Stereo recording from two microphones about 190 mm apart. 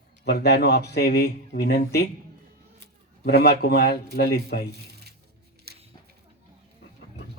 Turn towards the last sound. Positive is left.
turn(degrees=-55)  # may be behind; listen again after turning